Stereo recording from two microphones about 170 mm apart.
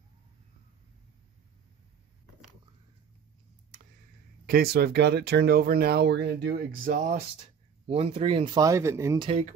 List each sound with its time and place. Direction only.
4.5 s speech: 65° right (ahead or behind); by 6.5 s 85° right
6.7 s speech: 55° right (ahead or behind); by 8.5 s 35° right (ahead or behind)
8.5 s speech: 20° right (ahead or behind)
9.2 s speech: 35° right (ahead or behind)